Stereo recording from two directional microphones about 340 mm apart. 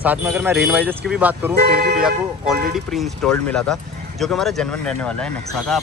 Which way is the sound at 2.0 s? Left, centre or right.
Centre.